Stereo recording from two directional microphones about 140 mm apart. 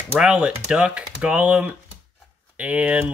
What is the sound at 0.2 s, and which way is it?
Speech, 5° right (ahead or behind).